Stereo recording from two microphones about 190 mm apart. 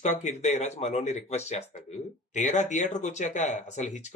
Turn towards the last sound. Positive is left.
turn(degrees=40)  # may be behind; listen again after turning